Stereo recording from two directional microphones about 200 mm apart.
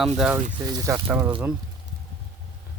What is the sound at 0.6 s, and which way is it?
Speech, 20° right (ahead or behind).